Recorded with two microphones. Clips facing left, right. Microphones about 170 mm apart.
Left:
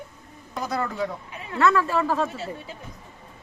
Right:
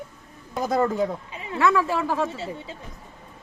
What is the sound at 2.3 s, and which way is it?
Speech, 25° right (ahead or behind).